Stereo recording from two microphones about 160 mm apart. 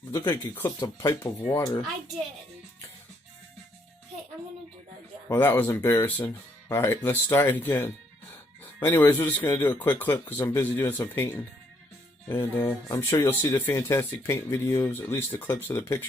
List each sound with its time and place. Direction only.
0.9 s speech: 25° left (ahead or behind)
1.4 s speech: 10° left (ahead or behind)
5.3 s speech: 15° left (ahead or behind)